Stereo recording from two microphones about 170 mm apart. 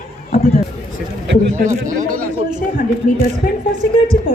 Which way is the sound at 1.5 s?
45° right (ahead or behind).